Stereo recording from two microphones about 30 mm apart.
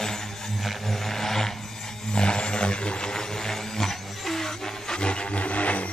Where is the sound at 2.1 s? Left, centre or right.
Left.